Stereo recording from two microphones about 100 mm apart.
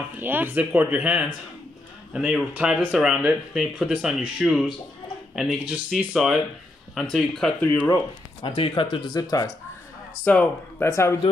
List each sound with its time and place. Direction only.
0.2 s speech: 20° right (ahead or behind); by 7.5 s 5° left (ahead or behind)
8.4 s speech: 60° left (ahead or behind)
9.1 s speech: 40° left (ahead or behind)
10.3 s speech: 15° left (ahead or behind)
10.8 s speech: 25° left (ahead or behind)